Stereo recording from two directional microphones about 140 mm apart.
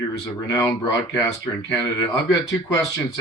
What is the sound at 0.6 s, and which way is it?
Speech, 30° left (ahead or behind).